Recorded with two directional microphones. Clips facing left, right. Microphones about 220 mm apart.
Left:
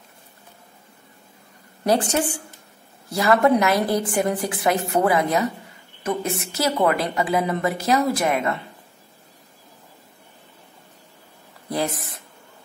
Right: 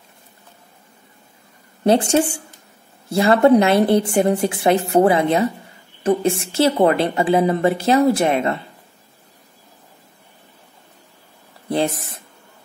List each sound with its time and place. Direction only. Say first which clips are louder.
1.9 s a woman's voice: right 5 dB; 25° right (ahead or behind)
11.7 s a woman's voice: right 5 dB; 25° right (ahead or behind)